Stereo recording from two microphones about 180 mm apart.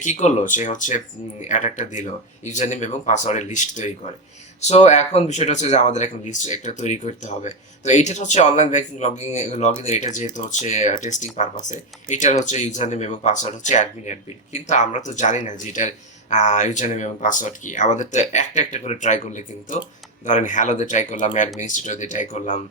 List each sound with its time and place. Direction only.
0.0 s speech: 40° left (ahead or behind)